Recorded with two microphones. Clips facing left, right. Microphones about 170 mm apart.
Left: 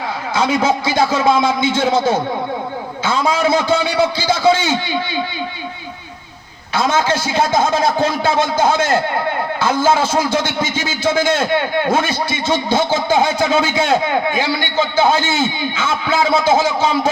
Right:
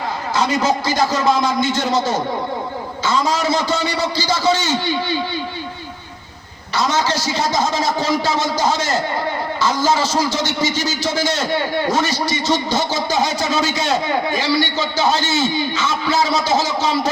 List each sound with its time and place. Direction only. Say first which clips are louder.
0.9 s a man's voice: left 4 dB; 55° left (ahead or behind)
6.7 s a man's voice: left 3 dB; 55° left (ahead or behind)